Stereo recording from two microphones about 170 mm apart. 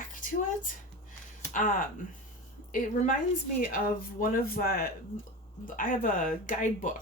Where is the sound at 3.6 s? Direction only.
55° left (ahead or behind).